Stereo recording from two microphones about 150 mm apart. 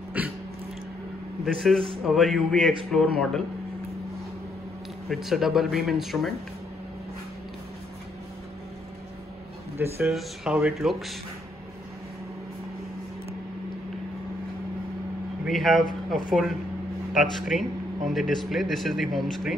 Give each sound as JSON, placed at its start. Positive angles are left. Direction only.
{"t": 0.2, "sound": "dog", "side_deg": -10}
{"t": 1.4, "sound": "speech", "side_deg": 0}
{"t": 5.1, "sound": "speech", "side_deg": 0}
{"t": 9.8, "sound": "a man's voice", "side_deg": -15}
{"t": 10.1, "sound": "speech", "side_deg": -5}
{"t": 15.4, "sound": "speech", "side_deg": 0}